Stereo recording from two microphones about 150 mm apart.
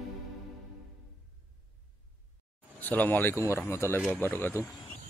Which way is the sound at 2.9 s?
10° left (ahead or behind).